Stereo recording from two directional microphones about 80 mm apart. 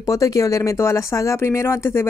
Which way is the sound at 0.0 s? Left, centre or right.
Left.